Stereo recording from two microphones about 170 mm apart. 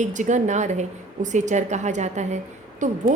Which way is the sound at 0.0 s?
45° right (ahead or behind).